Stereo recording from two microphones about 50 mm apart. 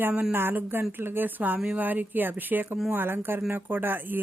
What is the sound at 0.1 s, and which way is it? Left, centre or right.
Speech, right.